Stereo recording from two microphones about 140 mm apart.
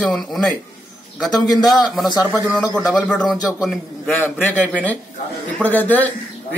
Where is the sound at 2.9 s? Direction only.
5° left (ahead or behind).